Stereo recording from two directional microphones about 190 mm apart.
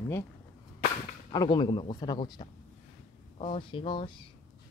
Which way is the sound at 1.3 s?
25° left (ahead or behind).